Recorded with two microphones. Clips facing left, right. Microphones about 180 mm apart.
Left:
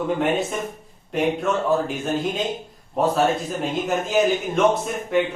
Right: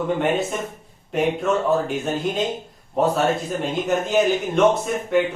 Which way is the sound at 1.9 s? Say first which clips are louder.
Right 1 dB; centre (ahead or behind).